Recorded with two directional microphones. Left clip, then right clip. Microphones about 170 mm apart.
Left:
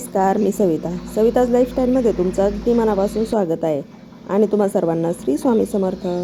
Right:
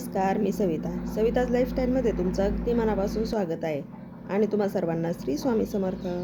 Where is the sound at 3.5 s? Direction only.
35° left (ahead or behind).